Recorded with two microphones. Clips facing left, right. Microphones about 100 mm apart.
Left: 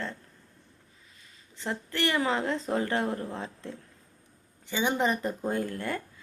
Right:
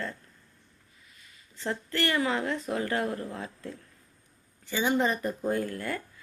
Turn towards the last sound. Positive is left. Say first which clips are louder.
# even
turn(degrees=25)  # may be behind; listen again after turning